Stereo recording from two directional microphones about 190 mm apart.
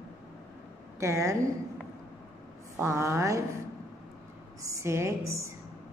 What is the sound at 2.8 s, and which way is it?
Speech, 15° right (ahead or behind).